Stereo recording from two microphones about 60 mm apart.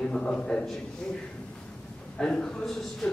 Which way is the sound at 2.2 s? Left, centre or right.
Centre.